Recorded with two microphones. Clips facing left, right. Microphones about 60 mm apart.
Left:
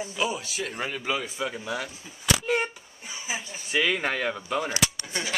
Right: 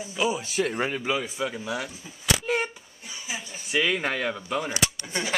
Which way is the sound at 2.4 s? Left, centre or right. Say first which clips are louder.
Even; centre.